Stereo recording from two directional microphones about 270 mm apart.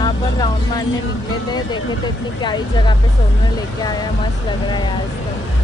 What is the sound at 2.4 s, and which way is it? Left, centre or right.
Speech, centre.